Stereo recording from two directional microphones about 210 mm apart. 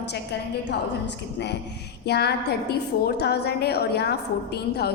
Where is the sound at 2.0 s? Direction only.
50° left (ahead or behind).